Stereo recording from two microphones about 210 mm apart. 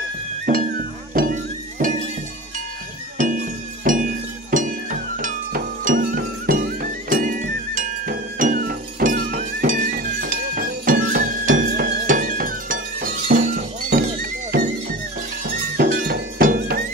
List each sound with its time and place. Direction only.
0.5 s music: 45° right (ahead or behind)
3.2 s music: 40° right (ahead or behind)
15.7 s music: 45° right (ahead or behind)